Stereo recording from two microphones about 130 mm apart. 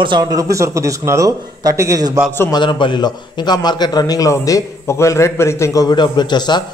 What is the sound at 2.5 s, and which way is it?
A man's voice, 35° left (ahead or behind).